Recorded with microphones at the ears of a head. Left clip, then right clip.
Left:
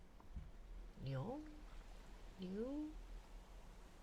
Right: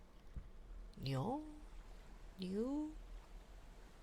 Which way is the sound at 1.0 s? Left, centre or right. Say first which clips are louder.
Right 6 dB; right.